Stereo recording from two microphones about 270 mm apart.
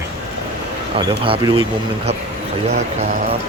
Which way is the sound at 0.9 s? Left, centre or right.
Centre.